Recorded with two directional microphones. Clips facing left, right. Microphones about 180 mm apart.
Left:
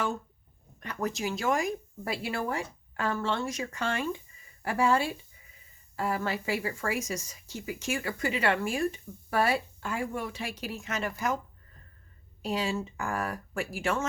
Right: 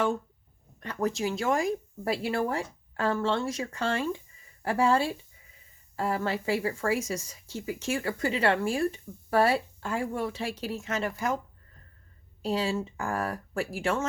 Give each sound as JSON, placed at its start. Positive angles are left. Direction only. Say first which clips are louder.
{"t": 0.8, "sound": "speech", "louder": "right 3 dB", "side_deg": -30}
{"t": 12.4, "sound": "speech", "louder": "right 2 dB", "side_deg": -30}